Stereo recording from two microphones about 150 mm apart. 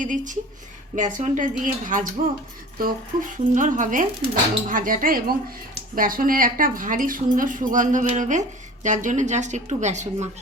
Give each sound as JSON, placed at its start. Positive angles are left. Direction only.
{"t": 0.0, "sound": "speech", "side_deg": -60}